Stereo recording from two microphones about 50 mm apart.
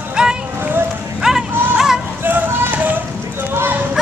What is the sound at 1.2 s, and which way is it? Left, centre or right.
Music, centre.